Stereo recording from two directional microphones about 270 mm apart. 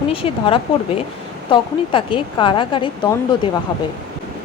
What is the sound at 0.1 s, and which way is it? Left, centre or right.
Speech, left.